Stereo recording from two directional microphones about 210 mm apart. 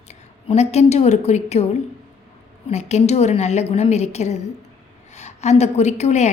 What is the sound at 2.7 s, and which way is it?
A woman's voice, 30° left (ahead or behind).